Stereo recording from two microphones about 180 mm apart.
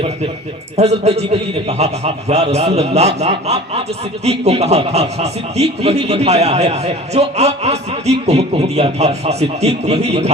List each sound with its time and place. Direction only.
0.8 s speech: 35° right (ahead or behind)